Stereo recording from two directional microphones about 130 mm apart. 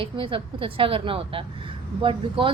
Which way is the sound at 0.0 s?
40° right (ahead or behind).